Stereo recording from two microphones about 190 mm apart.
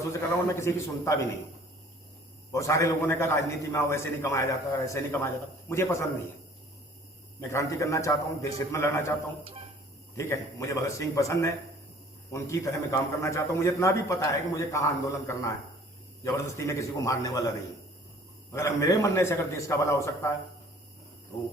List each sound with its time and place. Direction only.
0.1 s a man's voice: 15° left (ahead or behind)
2.5 s a man's voice: 15° left (ahead or behind)
7.5 s a man's voice: 15° left (ahead or behind)
10.2 s a man's voice: 15° left (ahead or behind)
18.5 s a man's voice: 15° left (ahead or behind)